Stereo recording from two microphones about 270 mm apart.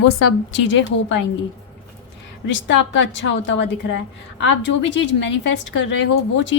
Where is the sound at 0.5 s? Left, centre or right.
Left.